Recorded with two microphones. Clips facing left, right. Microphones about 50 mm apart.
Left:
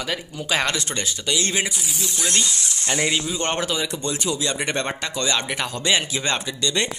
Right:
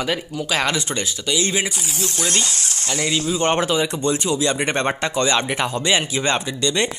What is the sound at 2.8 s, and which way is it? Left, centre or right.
Speech, centre.